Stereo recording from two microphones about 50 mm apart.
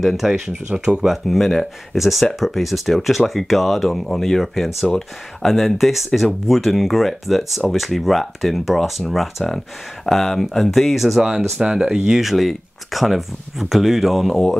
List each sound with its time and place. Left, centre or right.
0.2 s speech: centre
1.1 s speech: centre